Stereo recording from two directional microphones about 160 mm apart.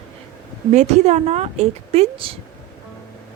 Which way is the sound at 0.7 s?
45° right (ahead or behind).